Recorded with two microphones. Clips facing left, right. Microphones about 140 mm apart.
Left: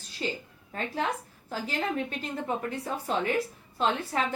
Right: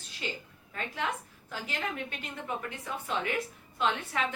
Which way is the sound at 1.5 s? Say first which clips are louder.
Left 5 dB; 35° left (ahead or behind).